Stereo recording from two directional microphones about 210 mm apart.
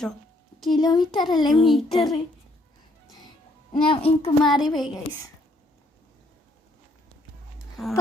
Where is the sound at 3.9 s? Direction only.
25° left (ahead or behind).